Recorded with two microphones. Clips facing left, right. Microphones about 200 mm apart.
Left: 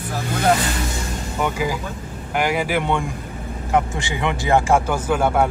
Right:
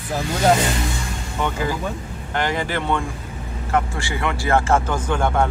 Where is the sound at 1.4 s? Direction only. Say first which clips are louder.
Even; 10° left (ahead or behind).